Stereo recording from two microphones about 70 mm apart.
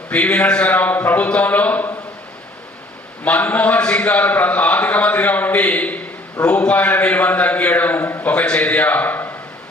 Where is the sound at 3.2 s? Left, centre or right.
Left.